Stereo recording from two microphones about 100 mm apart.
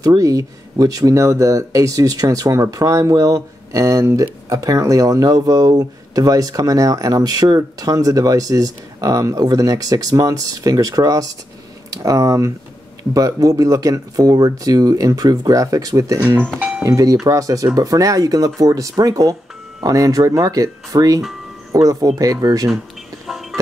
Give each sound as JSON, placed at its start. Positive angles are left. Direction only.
{"t": 0.0, "sound": "speech", "side_deg": -35}
{"t": 16.5, "sound": "doorbell", "side_deg": -15}
{"t": 16.8, "sound": "speech", "side_deg": -35}
{"t": 23.2, "sound": "music", "side_deg": 0}